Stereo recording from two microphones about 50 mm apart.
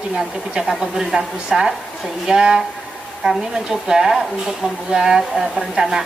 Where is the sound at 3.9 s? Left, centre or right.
Centre.